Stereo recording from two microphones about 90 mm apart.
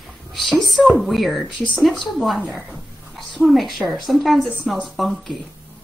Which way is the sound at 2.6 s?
Centre (ahead or behind).